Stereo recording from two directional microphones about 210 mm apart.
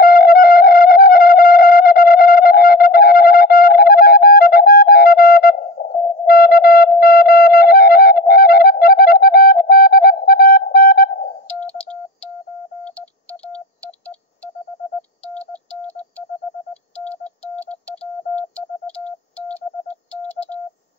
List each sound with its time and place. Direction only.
0.0 s music: 45° left (ahead or behind)
6.2 s sidetone: 45° left (ahead or behind)
7.0 s music: 45° left (ahead or behind)
11.6 s typewriter: 5° left (ahead or behind)
17.0 s music: 5° left (ahead or behind)
19.3 s telephone dialing: 5° left (ahead or behind)